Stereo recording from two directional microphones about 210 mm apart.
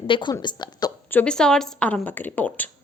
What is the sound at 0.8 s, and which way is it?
A woman's voice, 5° left (ahead or behind).